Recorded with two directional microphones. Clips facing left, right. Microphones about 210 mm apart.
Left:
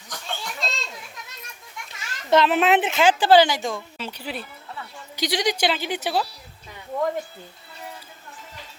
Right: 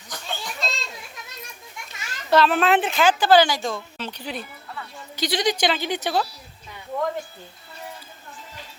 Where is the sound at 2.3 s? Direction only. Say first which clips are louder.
Even; 20° left (ahead or behind).